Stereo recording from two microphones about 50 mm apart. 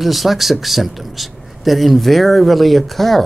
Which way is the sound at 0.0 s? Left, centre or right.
Centre.